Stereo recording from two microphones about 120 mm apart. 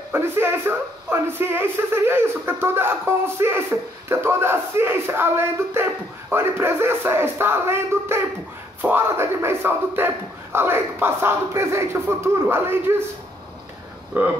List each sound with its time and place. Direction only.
0.1 s a man's voice: 20° right (ahead or behind)
14.1 s speech: 15° right (ahead or behind)